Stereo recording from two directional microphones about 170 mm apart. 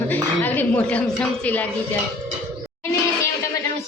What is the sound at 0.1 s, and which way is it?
Dishes, 10° left (ahead or behind).